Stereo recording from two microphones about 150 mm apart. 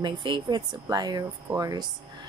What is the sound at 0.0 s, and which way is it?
Speech, 30° right (ahead or behind).